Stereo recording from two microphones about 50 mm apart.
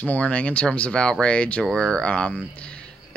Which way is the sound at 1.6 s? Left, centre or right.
Centre.